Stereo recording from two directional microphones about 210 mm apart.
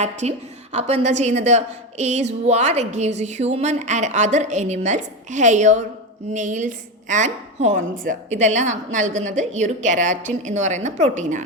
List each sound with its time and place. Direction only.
0.0 s a woman's voice: 35° right (ahead or behind)